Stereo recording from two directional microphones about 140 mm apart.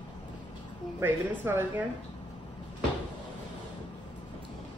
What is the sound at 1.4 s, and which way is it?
Speech, 15° right (ahead or behind).